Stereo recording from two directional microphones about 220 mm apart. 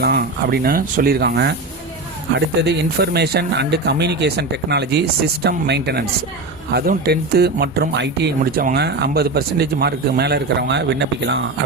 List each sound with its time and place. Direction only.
0.0 s speech: 45° right (ahead or behind)